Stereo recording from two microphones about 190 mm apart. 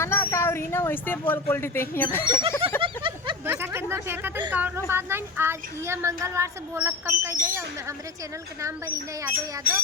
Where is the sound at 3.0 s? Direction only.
25° right (ahead or behind).